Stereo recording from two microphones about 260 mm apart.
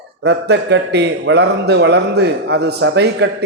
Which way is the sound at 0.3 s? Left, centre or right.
Right.